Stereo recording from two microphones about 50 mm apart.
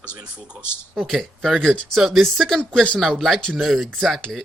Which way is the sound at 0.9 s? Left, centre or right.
Centre.